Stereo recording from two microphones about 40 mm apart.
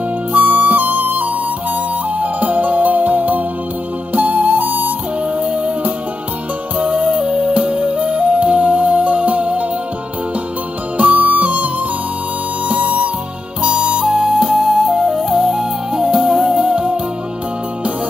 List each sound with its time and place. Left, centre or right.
0.3 s flute: right
2.1 s music: right
5.4 s music: right
11.0 s music: right
13.6 s music: right